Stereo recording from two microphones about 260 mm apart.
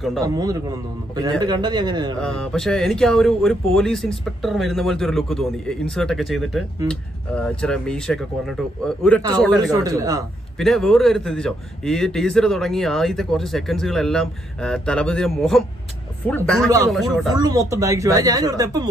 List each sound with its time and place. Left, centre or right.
0.2 s speech: centre
2.1 s a man's voice: centre
9.6 s speech: centre
10.6 s a man's voice: centre
17.3 s speech: centre